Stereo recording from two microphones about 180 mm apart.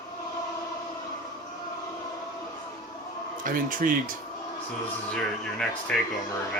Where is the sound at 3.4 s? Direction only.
50° right (ahead or behind).